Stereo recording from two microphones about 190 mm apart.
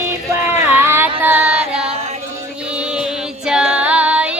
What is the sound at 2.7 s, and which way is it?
Female singing, 5° right (ahead or behind).